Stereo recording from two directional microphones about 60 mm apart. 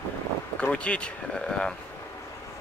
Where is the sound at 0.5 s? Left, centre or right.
Left.